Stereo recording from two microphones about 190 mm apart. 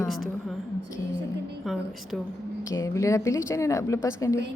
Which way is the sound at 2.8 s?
15° left (ahead or behind).